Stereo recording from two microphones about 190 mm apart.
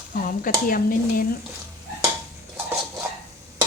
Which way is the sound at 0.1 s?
50° left (ahead or behind).